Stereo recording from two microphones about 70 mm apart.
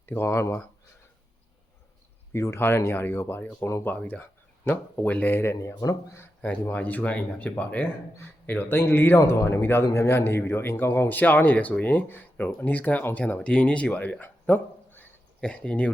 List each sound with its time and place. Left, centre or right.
0.0 s speech: left
2.3 s speech: left
3.8 s speech: left
6.4 s speech: left